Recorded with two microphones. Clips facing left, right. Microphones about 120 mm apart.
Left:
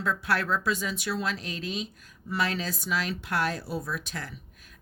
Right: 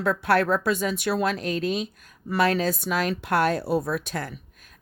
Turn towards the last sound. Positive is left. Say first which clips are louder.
# right 5 dB
turn(degrees=-50)  # may be behind; listen again after turning